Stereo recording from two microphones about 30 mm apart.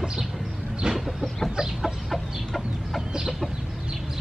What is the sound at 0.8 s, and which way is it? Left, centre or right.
Chicken, right.